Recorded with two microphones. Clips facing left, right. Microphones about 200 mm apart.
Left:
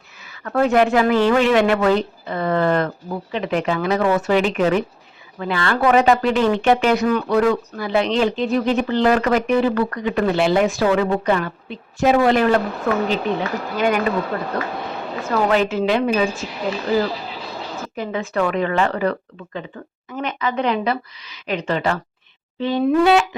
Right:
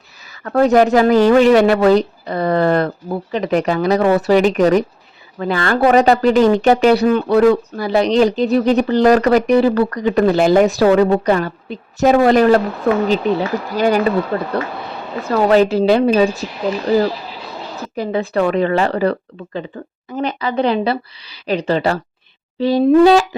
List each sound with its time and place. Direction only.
0.3 s speech: 40° right (ahead or behind)
15.3 s speech: 35° right (ahead or behind)
17.9 s speech: 35° right (ahead or behind)